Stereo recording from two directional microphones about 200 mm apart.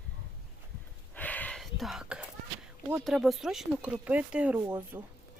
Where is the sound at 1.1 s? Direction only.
10° left (ahead or behind).